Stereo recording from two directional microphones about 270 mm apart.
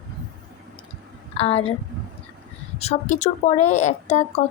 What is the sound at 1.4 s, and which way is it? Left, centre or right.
Speech, left.